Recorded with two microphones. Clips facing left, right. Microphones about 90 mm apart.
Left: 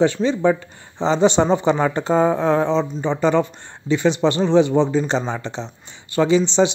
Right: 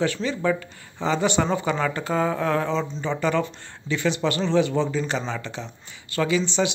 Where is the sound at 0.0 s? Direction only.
25° left (ahead or behind).